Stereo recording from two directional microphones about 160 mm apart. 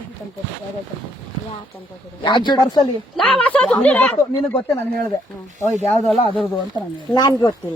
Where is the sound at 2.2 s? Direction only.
30° left (ahead or behind).